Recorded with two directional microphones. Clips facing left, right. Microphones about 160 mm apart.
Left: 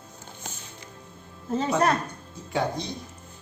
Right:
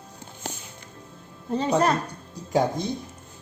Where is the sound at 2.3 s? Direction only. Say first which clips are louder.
Right 5 dB; 40° right (ahead or behind).